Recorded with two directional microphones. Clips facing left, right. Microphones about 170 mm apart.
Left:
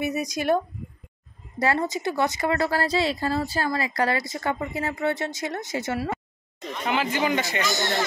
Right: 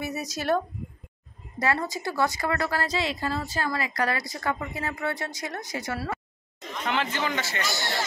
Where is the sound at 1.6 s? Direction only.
30° left (ahead or behind).